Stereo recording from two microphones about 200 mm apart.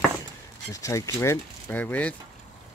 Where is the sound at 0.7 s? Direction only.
15° left (ahead or behind).